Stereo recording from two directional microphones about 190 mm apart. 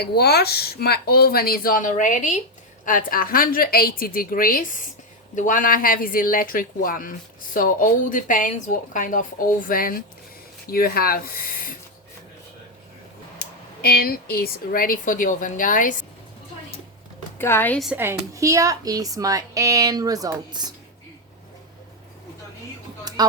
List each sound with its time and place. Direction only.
0.0 s speech: 55° left (ahead or behind)
13.8 s speech: 55° left (ahead or behind)
17.3 s speech: 10° left (ahead or behind)
17.8 s speech: 10° right (ahead or behind)